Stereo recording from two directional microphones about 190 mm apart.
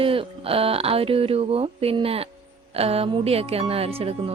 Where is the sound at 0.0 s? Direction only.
30° right (ahead or behind).